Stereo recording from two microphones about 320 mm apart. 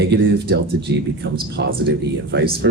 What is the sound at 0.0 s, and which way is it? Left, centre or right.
Speech, right.